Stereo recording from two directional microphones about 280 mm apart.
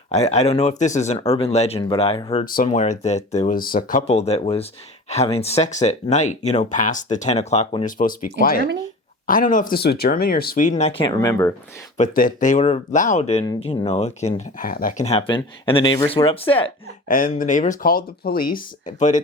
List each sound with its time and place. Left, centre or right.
0.1 s speech: left
11.9 s speech: left